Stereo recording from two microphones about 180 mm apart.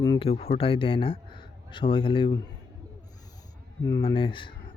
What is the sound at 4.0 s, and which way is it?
Speech, 30° left (ahead or behind).